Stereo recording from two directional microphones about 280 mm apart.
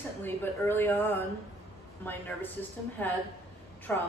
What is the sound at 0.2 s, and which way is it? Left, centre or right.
Speech, centre.